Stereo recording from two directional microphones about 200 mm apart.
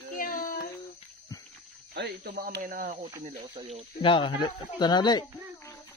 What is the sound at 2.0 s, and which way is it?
Speech, 50° right (ahead or behind).